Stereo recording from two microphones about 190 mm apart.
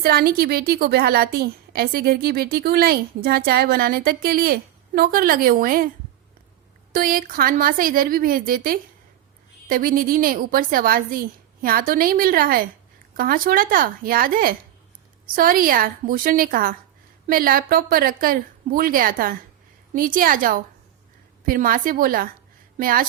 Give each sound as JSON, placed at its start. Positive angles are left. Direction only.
{"t": 0.0, "sound": "a woman's voice", "side_deg": -55}
{"t": 6.9, "sound": "a woman's voice", "side_deg": -50}